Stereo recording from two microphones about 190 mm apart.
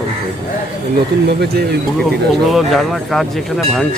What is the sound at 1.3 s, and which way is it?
Speech, 60° right (ahead or behind).